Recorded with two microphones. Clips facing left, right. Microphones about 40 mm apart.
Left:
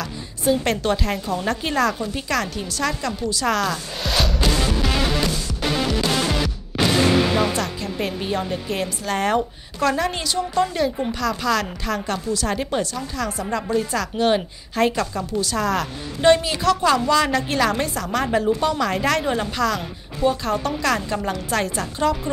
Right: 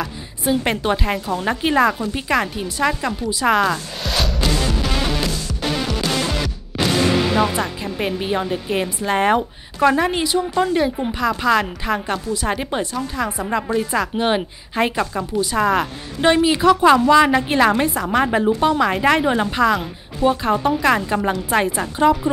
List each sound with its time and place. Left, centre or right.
0.0 s a woman's voice: centre
4.0 s music: centre
7.3 s a woman's voice: right